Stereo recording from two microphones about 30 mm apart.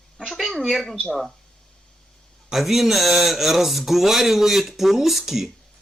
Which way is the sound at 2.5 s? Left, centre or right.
Centre.